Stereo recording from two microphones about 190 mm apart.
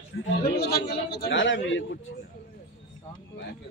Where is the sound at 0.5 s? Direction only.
55° left (ahead or behind); by 1.8 s 75° left (ahead or behind).